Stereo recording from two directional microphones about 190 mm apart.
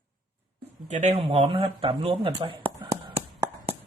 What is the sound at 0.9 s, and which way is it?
Speech, 40° right (ahead or behind).